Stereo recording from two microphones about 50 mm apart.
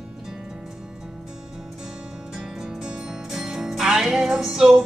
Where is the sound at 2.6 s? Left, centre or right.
Centre.